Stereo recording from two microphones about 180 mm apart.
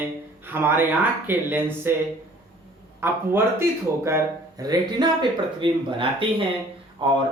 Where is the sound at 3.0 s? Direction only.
15° right (ahead or behind).